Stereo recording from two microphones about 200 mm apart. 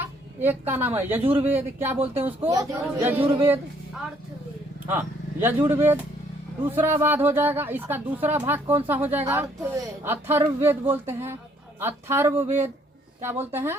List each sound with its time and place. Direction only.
0.3 s a woman's voice: 10° right (ahead or behind)